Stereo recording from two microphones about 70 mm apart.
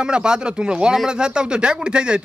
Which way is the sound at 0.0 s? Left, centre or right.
Centre.